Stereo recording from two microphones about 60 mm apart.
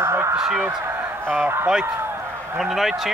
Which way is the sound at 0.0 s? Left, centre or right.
Right.